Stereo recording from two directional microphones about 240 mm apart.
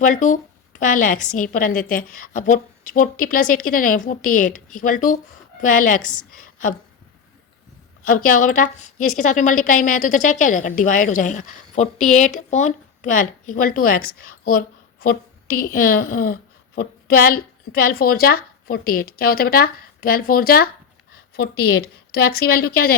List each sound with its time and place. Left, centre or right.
0.0 s a woman's voice: left
8.0 s a woman's voice: left